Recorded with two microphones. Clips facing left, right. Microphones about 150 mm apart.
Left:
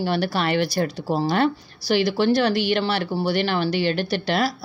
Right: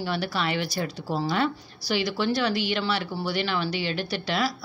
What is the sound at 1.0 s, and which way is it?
Speech, 35° left (ahead or behind).